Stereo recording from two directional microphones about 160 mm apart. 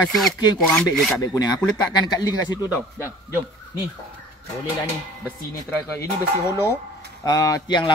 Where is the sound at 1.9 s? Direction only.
25° left (ahead or behind).